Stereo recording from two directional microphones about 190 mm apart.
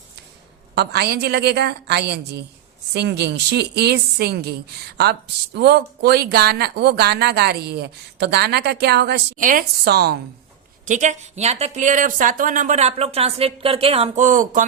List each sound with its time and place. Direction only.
0.8 s speech: 60° right (ahead or behind)
9.4 s speech: 45° right (ahead or behind)
10.8 s speech: 40° right (ahead or behind)